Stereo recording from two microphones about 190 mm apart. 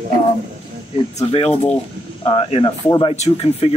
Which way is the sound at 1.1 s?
30° left (ahead or behind).